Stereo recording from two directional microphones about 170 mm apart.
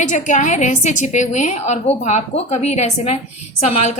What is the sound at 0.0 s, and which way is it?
A woman's voice, 45° left (ahead or behind).